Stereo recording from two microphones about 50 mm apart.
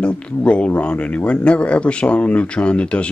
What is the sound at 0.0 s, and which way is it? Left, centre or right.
Speech, left.